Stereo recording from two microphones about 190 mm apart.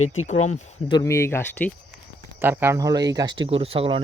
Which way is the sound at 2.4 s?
10° right (ahead or behind).